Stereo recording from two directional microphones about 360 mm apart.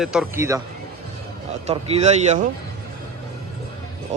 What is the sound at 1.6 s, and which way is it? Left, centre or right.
Speech, centre.